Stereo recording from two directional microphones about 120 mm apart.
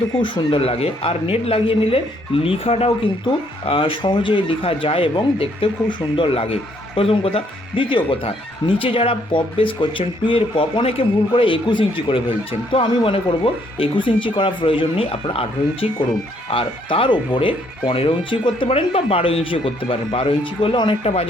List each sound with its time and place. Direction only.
0.2 s speech: 50° left (ahead or behind)
21.0 s speech: 55° left (ahead or behind)